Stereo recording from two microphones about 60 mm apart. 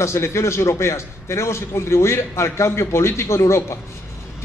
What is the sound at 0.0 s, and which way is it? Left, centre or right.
A man's voice, left.